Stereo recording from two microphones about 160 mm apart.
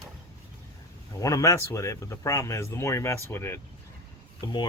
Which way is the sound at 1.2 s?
20° left (ahead or behind).